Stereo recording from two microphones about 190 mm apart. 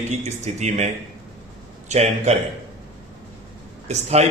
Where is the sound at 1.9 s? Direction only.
35° right (ahead or behind).